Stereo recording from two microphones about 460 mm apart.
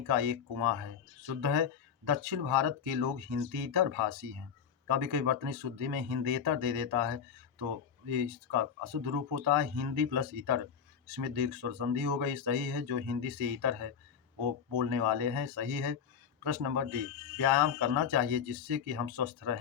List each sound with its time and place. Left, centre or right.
0.1 s speech: right
14.3 s speech: right
14.8 s speech: right